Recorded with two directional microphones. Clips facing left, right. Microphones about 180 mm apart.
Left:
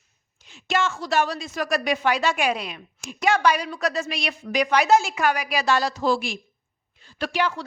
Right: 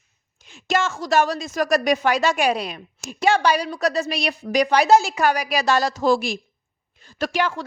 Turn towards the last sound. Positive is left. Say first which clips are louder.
# right 2 dB
turn(degrees=-45)  # may be behind; listen again after turning